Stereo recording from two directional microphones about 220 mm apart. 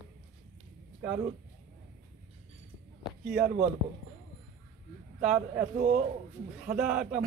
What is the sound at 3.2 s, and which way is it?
Speech, 5° right (ahead or behind).